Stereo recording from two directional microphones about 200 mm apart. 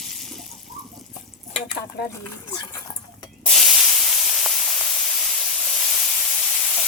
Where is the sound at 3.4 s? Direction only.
Centre (ahead or behind).